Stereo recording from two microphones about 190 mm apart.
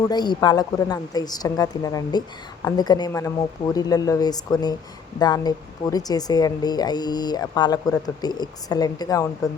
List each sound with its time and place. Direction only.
0.1 s speech: 20° left (ahead or behind)